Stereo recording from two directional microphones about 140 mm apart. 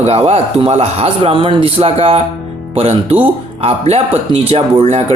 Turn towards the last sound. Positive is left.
turn(degrees=-45)  # may be behind; listen again after turning